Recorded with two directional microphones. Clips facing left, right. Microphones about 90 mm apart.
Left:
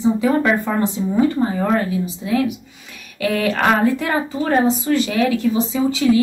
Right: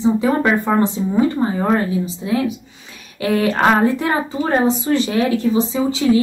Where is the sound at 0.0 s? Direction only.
25° right (ahead or behind).